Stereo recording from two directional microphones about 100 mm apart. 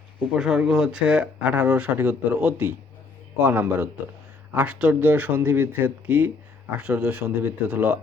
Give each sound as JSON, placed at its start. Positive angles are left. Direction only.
{"t": 0.3, "sound": "a man's voice", "side_deg": -5}